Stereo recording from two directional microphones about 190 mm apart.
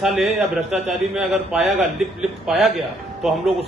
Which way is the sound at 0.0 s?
Centre (ahead or behind).